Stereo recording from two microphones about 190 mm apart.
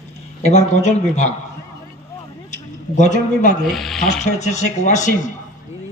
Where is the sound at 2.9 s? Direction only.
40° left (ahead or behind).